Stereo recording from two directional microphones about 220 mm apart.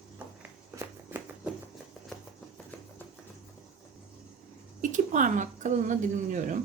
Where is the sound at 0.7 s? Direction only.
10° right (ahead or behind).